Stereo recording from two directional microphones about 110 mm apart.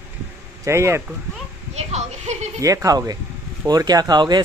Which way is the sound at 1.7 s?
90° right.